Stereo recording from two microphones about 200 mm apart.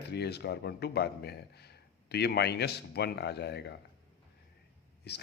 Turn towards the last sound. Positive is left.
turn(degrees=55)  # may be behind; listen again after turning